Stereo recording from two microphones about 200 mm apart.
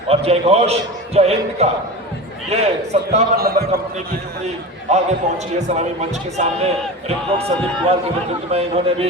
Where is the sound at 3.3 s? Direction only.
50° right (ahead or behind).